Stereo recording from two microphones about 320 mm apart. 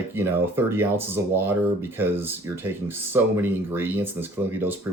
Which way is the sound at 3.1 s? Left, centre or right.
Centre.